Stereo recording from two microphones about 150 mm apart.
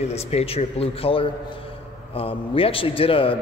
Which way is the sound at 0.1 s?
45° left (ahead or behind).